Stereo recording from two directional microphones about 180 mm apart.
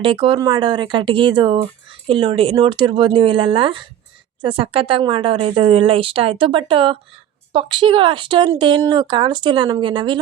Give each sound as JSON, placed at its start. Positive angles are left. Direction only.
{"t": 0.0, "sound": "speech", "side_deg": -30}